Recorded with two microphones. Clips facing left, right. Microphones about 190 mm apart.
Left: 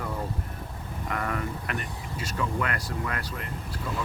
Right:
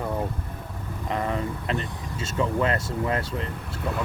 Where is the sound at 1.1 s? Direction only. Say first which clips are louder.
Right 4 dB; 25° right (ahead or behind).